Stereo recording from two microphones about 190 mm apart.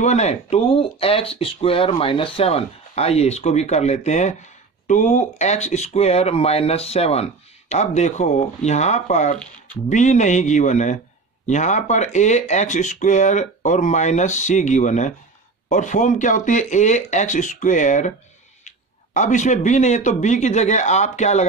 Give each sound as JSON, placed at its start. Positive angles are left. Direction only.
{"t": 0.0, "sound": "speech", "side_deg": 35}
{"t": 19.1, "sound": "speech", "side_deg": 40}